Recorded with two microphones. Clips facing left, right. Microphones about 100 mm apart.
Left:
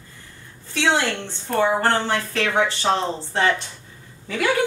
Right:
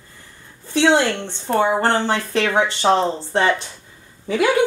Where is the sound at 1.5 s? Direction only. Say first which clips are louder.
Right 2 dB; 20° right (ahead or behind).